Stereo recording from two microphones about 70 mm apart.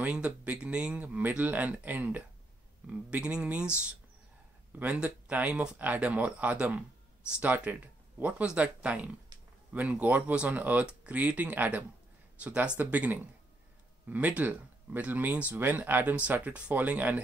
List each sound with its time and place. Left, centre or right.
0.0 s speech: centre
4.7 s speech: centre